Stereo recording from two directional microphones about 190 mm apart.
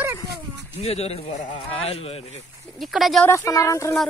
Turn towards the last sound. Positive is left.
turn(degrees=15)  # may be behind; listen again after turning